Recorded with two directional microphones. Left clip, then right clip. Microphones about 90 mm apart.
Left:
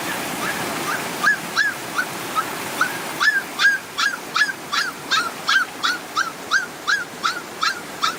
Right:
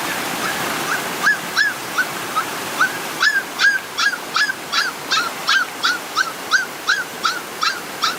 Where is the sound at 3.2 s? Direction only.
5° left (ahead or behind).